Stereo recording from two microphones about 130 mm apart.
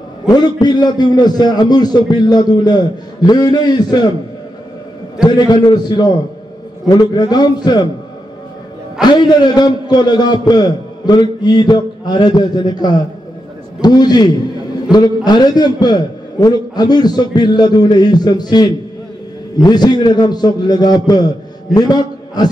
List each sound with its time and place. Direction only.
0.3 s a man's voice: 30° left (ahead or behind)
5.2 s a man's voice: 30° left (ahead or behind)
9.0 s a man's voice: 35° left (ahead or behind)